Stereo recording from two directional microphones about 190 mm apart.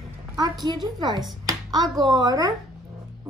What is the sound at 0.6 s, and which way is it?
Speech, 20° right (ahead or behind).